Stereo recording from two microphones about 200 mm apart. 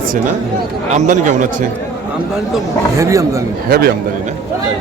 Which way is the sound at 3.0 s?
15° right (ahead or behind).